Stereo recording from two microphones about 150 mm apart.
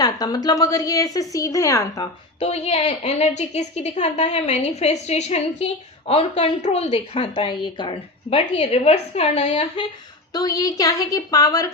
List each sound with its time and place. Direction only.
0.0 s a woman's voice: 25° left (ahead or behind)
2.4 s a woman's voice: 45° left (ahead or behind)
10.3 s a woman's voice: 25° left (ahead or behind)